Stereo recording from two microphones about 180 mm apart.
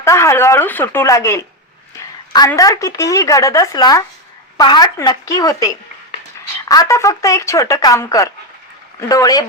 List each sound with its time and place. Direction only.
0.0 s speech: 15° left (ahead or behind)
2.5 s speech: 20° left (ahead or behind)
6.7 s speech: 20° left (ahead or behind)